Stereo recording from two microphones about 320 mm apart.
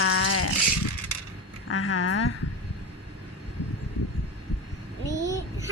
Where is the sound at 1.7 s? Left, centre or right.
Left.